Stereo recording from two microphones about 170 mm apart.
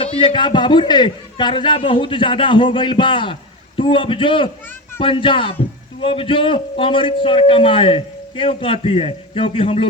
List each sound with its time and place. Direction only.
0.0 s a man's voice: 30° left (ahead or behind)